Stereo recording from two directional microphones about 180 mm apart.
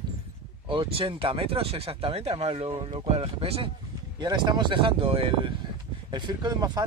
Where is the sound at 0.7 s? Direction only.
30° right (ahead or behind).